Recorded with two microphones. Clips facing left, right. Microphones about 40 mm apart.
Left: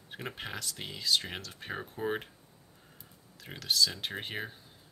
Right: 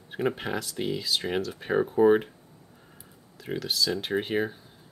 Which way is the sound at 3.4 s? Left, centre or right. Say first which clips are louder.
Right 1 dB; centre.